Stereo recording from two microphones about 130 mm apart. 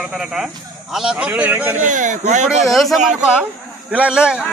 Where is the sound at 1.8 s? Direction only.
75° right (ahead or behind).